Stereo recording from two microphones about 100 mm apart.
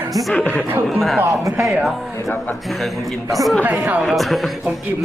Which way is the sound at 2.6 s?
Centre (ahead or behind).